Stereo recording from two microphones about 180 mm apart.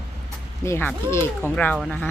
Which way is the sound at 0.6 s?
15° left (ahead or behind).